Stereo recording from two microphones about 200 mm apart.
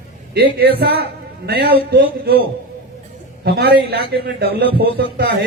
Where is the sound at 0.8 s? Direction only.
55° right (ahead or behind).